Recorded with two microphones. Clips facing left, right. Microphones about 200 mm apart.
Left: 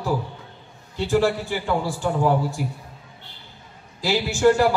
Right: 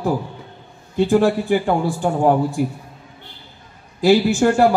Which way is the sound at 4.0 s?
55° right (ahead or behind).